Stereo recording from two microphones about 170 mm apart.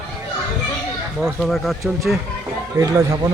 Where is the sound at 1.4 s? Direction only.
Centre (ahead or behind).